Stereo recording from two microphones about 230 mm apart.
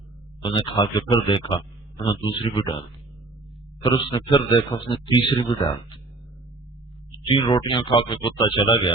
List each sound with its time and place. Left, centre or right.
0.4 s speech: left
3.8 s speech: centre
7.3 s speech: left